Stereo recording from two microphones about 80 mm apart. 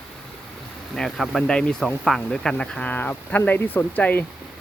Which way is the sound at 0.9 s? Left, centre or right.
Centre.